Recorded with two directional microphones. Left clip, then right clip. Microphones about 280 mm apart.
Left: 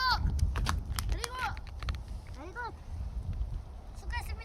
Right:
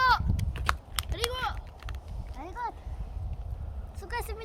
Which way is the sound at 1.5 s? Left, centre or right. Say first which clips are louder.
Even; centre.